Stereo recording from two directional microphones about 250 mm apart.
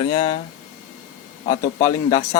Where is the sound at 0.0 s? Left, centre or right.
Centre.